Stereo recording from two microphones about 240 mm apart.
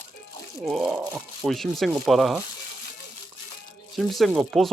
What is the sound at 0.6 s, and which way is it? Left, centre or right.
Speech, centre.